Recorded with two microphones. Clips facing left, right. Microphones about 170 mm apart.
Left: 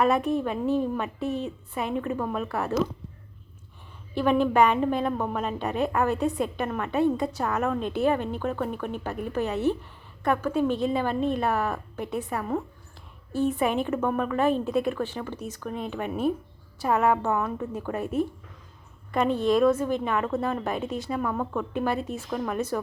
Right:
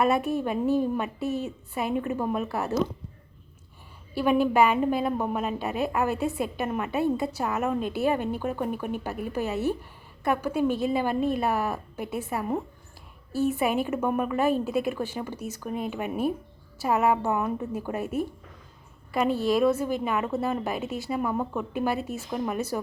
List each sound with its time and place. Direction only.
0.4 s a woman's voice: 10° right (ahead or behind)
1.2 s a woman's voice: 40° right (ahead or behind)
2.1 s a woman's voice: 10° right (ahead or behind)
4.1 s a woman's voice: 10° right (ahead or behind)